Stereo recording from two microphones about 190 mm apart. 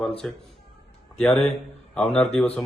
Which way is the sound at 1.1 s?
5° left (ahead or behind).